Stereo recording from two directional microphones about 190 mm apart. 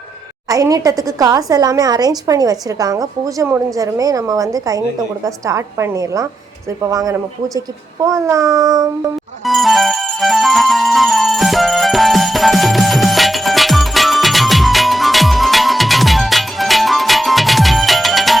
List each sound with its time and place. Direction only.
0.4 s a child's voice: 20° right (ahead or behind)
9.5 s music: centre (ahead or behind)